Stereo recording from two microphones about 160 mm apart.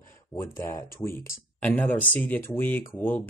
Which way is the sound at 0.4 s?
15° left (ahead or behind).